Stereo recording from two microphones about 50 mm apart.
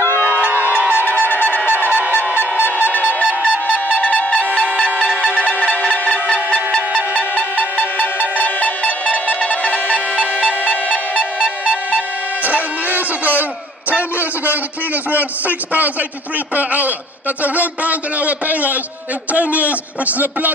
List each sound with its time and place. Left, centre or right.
0.3 s music: right
1.3 s trumpet: left
2.9 s trumpet: left
3.4 s music: left
5.8 s music: left
7.2 s music: left
11.1 s music: centre
12.4 s a sound: right
15.0 s a man's voice: right